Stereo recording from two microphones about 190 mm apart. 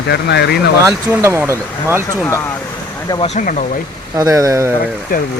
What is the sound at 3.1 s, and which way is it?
Speech, 35° left (ahead or behind).